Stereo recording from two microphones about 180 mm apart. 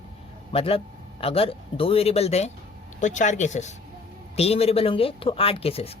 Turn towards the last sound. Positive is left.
turn(degrees=35)  # may be behind; listen again after turning